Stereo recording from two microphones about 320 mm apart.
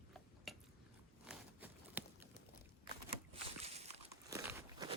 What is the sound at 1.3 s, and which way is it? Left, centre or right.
Walk, centre.